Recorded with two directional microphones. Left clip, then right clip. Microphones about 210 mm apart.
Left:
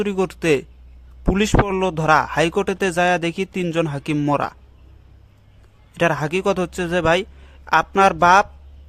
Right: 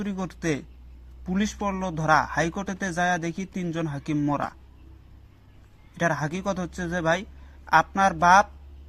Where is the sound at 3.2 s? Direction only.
55° left (ahead or behind).